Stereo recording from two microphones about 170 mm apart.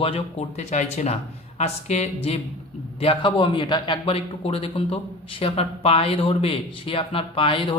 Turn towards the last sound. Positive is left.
turn(degrees=30)  # may be behind; listen again after turning